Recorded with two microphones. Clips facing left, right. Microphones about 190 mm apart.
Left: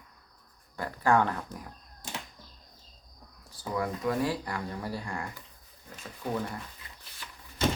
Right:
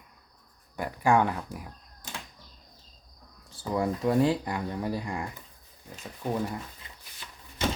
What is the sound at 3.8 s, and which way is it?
Speech, 25° right (ahead or behind).